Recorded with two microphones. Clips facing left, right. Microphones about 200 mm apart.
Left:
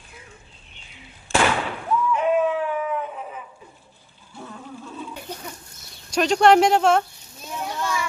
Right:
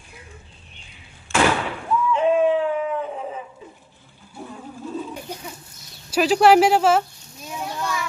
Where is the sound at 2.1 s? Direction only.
25° right (ahead or behind).